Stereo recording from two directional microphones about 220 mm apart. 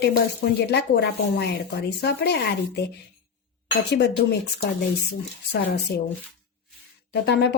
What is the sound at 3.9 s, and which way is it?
Speech, 50° left (ahead or behind).